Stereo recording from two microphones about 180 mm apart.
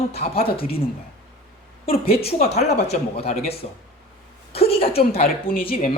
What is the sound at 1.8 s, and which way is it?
A man's voice, 30° left (ahead or behind).